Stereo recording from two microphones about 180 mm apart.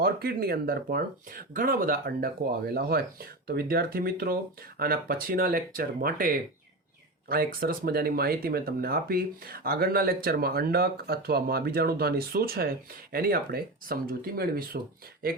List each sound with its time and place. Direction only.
0.0 s speech: 60° right (ahead or behind)